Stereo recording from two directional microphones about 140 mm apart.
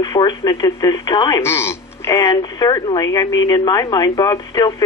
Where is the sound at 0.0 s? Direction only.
35° left (ahead or behind).